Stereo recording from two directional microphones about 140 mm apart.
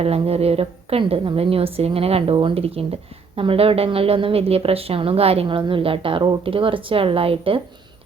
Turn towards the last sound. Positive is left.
turn(degrees=-40)  # may be behind; listen again after turning